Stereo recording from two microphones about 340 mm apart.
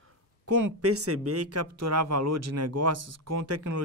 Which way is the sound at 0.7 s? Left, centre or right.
Right.